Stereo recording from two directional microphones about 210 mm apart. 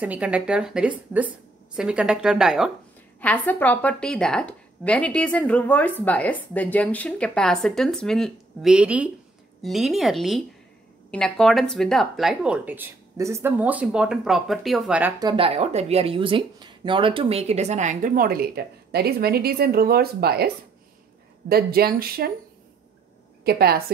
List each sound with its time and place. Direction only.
0.0 s a woman's voice: 5° right (ahead or behind)
3.2 s a woman's voice: 5° left (ahead or behind)
15.1 s speech: 25° right (ahead or behind); by 22.3 s 45° right (ahead or behind)
23.4 s speech: 45° right (ahead or behind)